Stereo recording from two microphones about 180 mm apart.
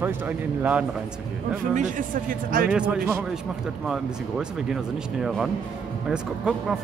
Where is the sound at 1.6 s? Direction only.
45° right (ahead or behind).